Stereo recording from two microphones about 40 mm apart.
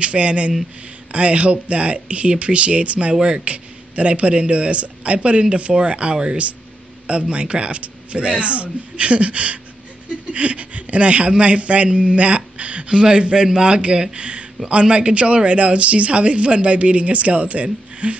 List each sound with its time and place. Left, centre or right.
0.0 s speech: right